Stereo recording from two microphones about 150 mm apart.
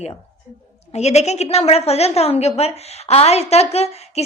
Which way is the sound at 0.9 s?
45° left (ahead or behind).